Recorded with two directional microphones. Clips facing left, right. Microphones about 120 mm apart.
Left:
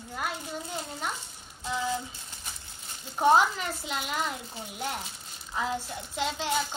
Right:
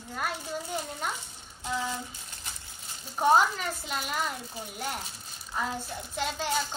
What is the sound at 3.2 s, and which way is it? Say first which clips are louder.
Speech: left 1 dB; centre (ahead or behind).